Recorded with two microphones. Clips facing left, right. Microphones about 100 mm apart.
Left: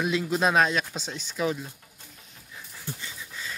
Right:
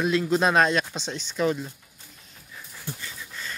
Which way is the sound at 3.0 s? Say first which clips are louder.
Right 1 dB; 10° left (ahead or behind).